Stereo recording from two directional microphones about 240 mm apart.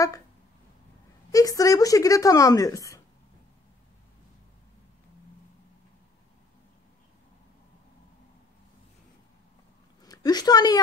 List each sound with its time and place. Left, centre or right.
1.3 s speech: centre
10.0 s a woman's voice: centre